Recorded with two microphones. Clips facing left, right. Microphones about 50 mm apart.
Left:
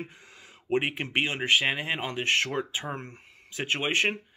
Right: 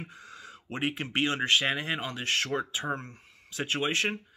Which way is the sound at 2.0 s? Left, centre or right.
Left.